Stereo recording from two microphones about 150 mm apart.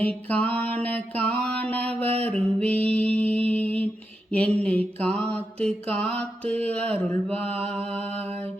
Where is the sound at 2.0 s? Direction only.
40° right (ahead or behind).